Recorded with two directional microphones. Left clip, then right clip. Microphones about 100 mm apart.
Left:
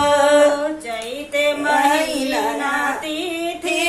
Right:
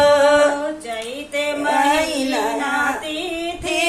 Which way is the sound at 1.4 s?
15° left (ahead or behind).